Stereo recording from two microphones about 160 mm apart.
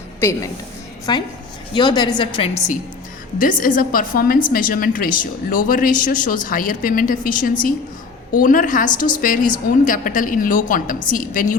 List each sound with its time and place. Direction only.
0.2 s a woman's voice: 15° left (ahead or behind)
3.3 s speech: 60° left (ahead or behind)